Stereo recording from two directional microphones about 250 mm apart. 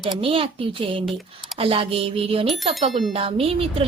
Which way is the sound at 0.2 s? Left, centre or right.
Right.